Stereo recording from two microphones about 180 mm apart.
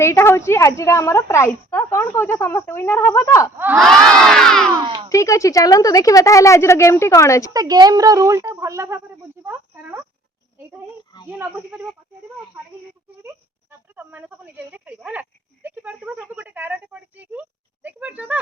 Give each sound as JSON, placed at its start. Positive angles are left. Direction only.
{"t": 0.0, "sound": "a woman's voice", "side_deg": 15}
{"t": 3.8, "sound": "crowd", "side_deg": 0}
{"t": 4.7, "sound": "speech", "side_deg": -20}
{"t": 5.0, "sound": "a woman's voice", "side_deg": 15}
{"t": 7.5, "sound": "speech", "side_deg": -20}
{"t": 11.3, "sound": "speech", "side_deg": -10}
{"t": 13.2, "sound": "a woman's voice", "side_deg": -10}